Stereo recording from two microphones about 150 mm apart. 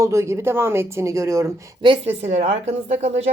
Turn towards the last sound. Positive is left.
turn(degrees=-45)  # may be behind; listen again after turning